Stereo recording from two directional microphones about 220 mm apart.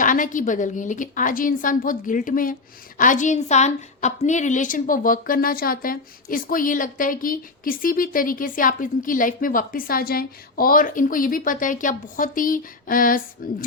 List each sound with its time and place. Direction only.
0.0 s a woman's voice: 35° left (ahead or behind)